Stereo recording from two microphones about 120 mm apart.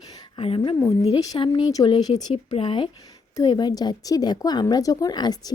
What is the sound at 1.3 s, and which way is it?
Speech, 45° left (ahead or behind).